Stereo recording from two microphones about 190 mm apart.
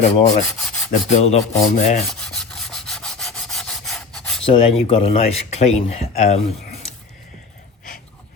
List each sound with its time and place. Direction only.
0.0 s speech: 35° left (ahead or behind)
2.0 s rub: centre (ahead or behind)
4.4 s speech: 30° left (ahead or behind)